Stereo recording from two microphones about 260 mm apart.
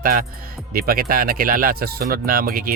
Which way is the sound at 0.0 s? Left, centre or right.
Right.